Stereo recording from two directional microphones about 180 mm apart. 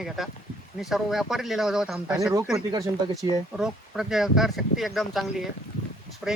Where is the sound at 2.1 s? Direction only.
15° right (ahead or behind).